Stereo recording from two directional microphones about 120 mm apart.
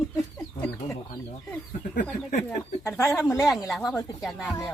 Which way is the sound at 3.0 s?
20° left (ahead or behind).